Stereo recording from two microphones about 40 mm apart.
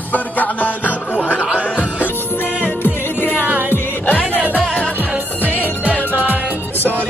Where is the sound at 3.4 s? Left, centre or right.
Right.